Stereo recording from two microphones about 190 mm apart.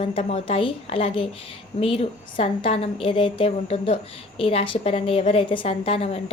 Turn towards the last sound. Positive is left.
turn(degrees=30)  # may be behind; listen again after turning